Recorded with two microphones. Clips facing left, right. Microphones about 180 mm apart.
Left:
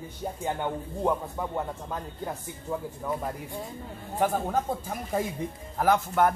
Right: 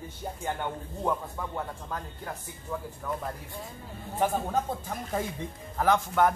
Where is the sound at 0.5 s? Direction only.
15° left (ahead or behind).